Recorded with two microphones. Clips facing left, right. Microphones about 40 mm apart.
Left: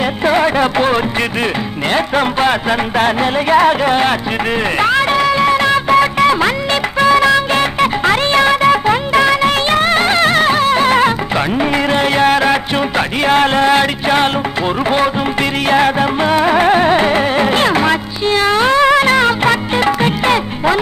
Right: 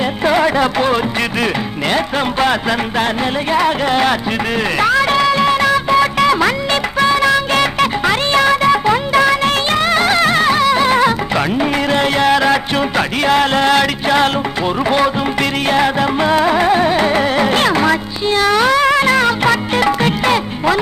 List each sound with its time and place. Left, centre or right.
1.9 s speech: left
3.5 s speech: left
3.8 s speech: centre
4.1 s speech: left
5.5 s music of bollywood: left
7.0 s music: left
7.5 s music: left
13.5 s music: left
15.7 s music: left
16.6 s carnatic music: left
17.5 s music: left
18.8 s music: left
19.7 s music: left